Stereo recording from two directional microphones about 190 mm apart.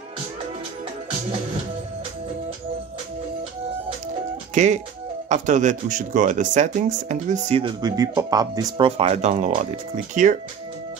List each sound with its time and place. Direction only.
4.6 s speech: 40° right (ahead or behind)